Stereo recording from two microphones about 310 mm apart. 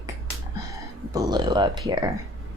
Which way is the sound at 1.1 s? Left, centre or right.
Centre.